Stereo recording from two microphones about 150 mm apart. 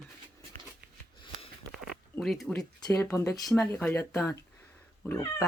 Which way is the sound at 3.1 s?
20° left (ahead or behind).